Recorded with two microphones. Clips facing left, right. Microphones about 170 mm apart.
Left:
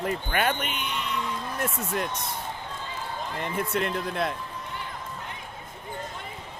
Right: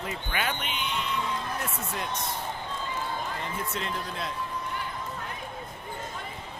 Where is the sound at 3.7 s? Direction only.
60° left (ahead or behind).